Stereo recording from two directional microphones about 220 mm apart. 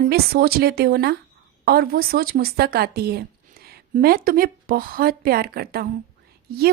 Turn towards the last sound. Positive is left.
turn(degrees=-45)  # may be behind; listen again after turning